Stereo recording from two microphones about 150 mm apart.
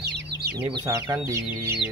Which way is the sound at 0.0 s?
90° right.